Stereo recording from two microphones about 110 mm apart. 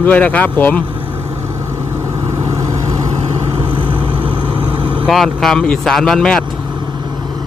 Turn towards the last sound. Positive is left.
turn(degrees=5)  # may be behind; listen again after turning